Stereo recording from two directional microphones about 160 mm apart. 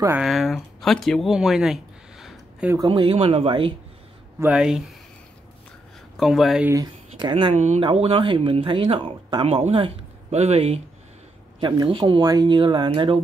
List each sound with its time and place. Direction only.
0.2 s speech: centre (ahead or behind)
2.9 s speech: 30° right (ahead or behind)
4.4 s speech: 5° right (ahead or behind)
6.1 s speech: centre (ahead or behind)
6.7 s speech: 25° right (ahead or behind)
7.5 s speech: 45° right (ahead or behind)
7.8 s speech: 35° right (ahead or behind)
11.6 s speech: 30° right (ahead or behind)